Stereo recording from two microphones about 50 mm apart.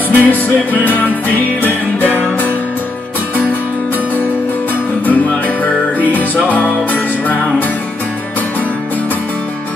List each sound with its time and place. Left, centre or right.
0.1 s music: left
5.0 s music: left